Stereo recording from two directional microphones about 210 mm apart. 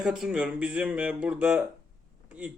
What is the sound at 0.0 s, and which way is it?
A man's voice, 5° right (ahead or behind).